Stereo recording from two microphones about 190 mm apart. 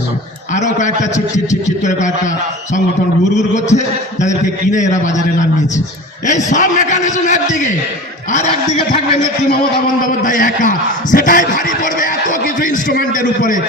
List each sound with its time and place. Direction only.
0.5 s a man's voice: 40° left (ahead or behind)
10.0 s a man's voice: 45° left (ahead or behind)